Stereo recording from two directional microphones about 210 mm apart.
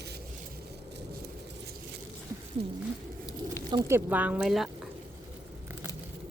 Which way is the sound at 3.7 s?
15° right (ahead or behind).